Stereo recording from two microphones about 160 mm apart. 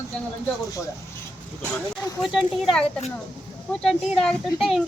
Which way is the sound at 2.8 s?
45° left (ahead or behind).